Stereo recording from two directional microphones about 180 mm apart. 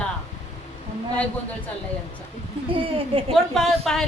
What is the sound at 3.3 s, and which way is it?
Speech, centre (ahead or behind).